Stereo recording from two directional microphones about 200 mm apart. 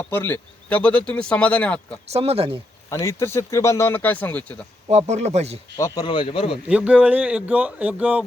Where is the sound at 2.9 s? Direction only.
15° left (ahead or behind).